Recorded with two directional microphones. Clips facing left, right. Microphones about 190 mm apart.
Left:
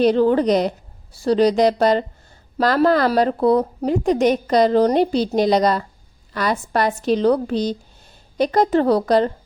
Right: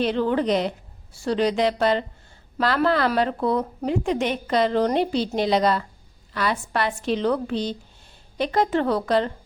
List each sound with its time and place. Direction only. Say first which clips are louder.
0.0 s a woman's voice: left 7 dB; 40° left (ahead or behind)